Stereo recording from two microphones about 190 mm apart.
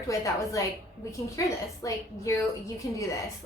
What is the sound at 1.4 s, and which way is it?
A woman's voice, 15° left (ahead or behind).